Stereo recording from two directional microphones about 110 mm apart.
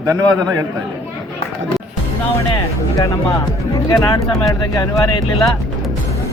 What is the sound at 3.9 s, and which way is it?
Speech, 30° left (ahead or behind).